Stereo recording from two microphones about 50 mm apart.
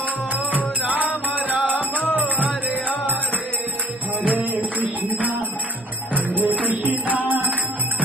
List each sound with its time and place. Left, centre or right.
0.8 s music: right
1.8 s music: left
2.1 s music: right
4.3 s music: right